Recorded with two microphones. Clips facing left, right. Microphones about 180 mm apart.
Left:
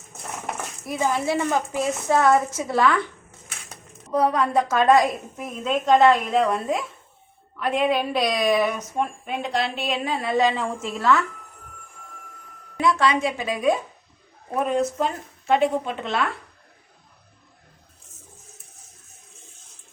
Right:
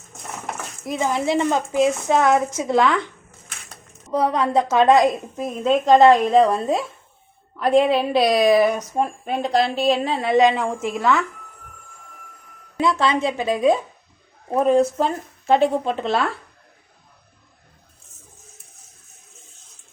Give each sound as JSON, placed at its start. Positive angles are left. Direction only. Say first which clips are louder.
{"t": 0.9, "sound": "a woman's voice", "louder": "right 2 dB", "side_deg": -20}
{"t": 4.1, "sound": "a woman's voice", "louder": "right 1 dB", "side_deg": -25}
{"t": 5.5, "sound": "speech", "louder": "right 4 dB", "side_deg": -35}
{"t": 12.8, "sound": "a woman's voice", "louder": "right 1 dB", "side_deg": -25}